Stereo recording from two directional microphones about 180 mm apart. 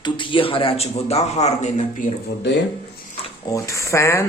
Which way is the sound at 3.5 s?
15° left (ahead or behind).